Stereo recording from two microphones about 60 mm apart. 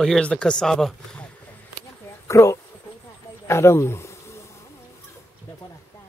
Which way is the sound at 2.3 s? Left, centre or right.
Left.